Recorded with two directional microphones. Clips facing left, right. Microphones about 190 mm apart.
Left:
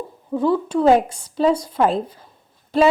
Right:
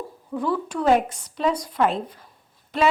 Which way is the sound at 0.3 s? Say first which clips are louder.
Left 6 dB; 25° left (ahead or behind).